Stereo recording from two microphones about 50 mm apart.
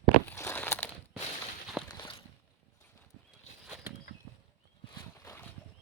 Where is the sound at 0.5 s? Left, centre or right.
Left.